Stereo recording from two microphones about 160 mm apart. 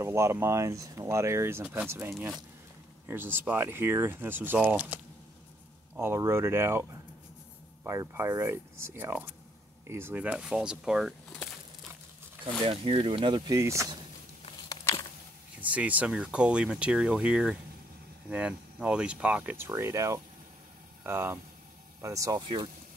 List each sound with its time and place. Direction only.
0.0 s speech: 15° right (ahead or behind)
2.1 s speech: 5° right (ahead or behind)
3.1 s speech: 15° right (ahead or behind)
12.6 s speech: 35° right (ahead or behind)
13.6 s speech: 20° right (ahead or behind)
15.6 s speech: 10° right (ahead or behind); by 22.7 s 25° right (ahead or behind)